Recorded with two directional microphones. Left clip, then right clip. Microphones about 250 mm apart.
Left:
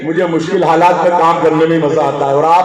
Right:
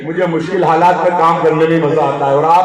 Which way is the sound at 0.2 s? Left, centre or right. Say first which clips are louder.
Even; left.